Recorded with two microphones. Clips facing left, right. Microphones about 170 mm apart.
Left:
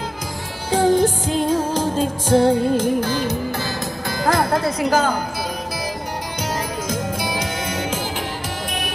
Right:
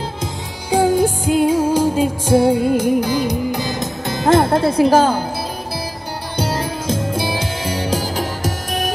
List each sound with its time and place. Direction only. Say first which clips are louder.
0.7 s music: right 1 dB; 10° right (ahead or behind); by 5.2 s 30° right (ahead or behind)
6.3 s music: right 6 dB; 30° right (ahead or behind)